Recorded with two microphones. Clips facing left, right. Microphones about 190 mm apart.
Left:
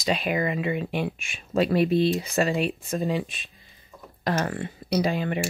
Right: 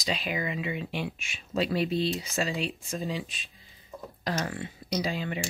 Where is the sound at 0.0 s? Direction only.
55° left (ahead or behind).